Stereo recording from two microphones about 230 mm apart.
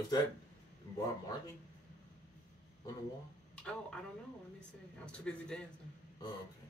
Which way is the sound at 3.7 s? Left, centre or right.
Centre.